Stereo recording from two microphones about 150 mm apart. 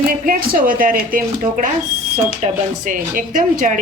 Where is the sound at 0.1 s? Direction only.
75° right (ahead or behind).